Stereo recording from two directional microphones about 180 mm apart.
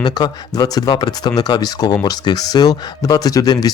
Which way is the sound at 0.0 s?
20° left (ahead or behind).